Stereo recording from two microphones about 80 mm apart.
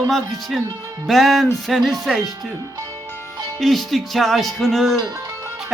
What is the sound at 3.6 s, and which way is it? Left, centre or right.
Music, centre.